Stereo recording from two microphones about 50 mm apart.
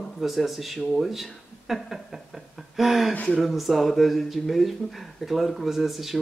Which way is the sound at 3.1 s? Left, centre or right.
Left.